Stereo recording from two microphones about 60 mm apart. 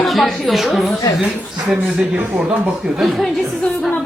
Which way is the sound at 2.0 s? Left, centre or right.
Right.